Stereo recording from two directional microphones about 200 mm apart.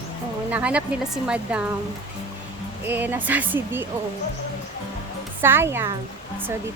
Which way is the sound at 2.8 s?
10° right (ahead or behind).